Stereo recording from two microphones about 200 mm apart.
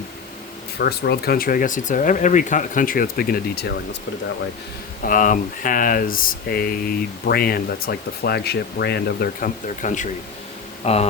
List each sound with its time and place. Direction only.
0.8 s speech: 50° left (ahead or behind)
5.0 s speech: 40° left (ahead or behind)